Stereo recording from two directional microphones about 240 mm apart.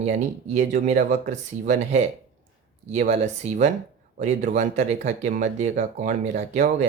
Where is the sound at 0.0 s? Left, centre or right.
Right.